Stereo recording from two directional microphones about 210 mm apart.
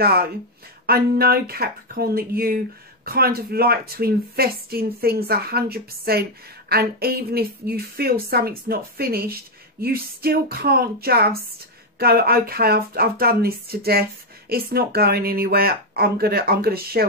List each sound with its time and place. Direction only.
0.0 s a woman's voice: 50° right (ahead or behind)